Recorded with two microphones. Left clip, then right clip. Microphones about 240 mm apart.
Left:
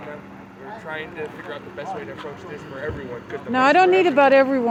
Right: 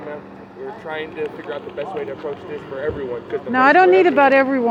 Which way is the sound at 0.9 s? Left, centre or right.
Left.